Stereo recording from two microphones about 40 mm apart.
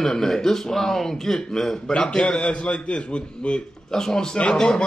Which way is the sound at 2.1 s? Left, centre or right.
Left.